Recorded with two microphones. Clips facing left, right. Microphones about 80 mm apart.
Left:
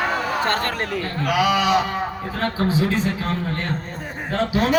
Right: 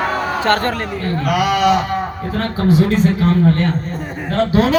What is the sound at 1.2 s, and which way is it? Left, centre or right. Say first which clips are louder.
Speech: right 4 dB; right.